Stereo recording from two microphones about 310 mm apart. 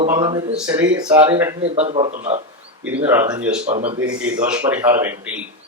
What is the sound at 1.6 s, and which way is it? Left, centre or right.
Speech, centre.